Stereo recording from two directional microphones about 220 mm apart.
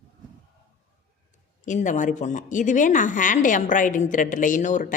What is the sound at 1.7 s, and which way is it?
A woman's voice, 35° left (ahead or behind).